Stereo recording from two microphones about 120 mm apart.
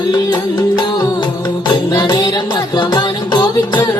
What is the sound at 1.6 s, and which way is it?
Music, 35° left (ahead or behind).